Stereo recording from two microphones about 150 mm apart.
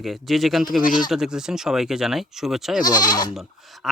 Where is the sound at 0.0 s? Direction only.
Centre (ahead or behind).